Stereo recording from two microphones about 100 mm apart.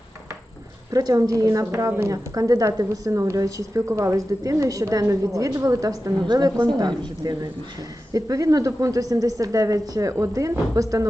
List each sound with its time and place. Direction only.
0.9 s a woman's voice: 35° right (ahead or behind)